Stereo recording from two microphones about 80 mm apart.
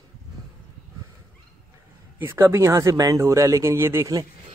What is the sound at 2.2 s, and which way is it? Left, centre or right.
Speech, right.